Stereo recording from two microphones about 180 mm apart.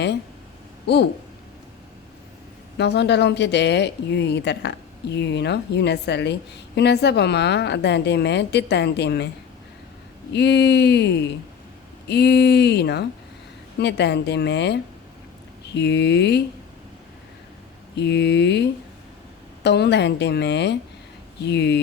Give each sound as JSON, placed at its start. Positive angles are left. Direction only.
{"t": 2.7, "sound": "a woman's voice", "side_deg": 70}
{"t": 10.3, "sound": "a woman's voice", "side_deg": 70}
{"t": 17.9, "sound": "a woman's voice", "side_deg": 70}